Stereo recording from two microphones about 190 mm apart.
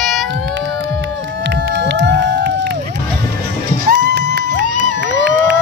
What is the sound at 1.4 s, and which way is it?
Crowd, 65° right (ahead or behind).